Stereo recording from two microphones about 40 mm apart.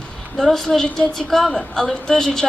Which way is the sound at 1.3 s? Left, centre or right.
Centre.